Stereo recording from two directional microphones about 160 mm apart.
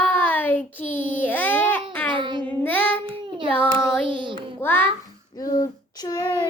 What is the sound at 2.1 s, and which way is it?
Child singing, 30° right (ahead or behind).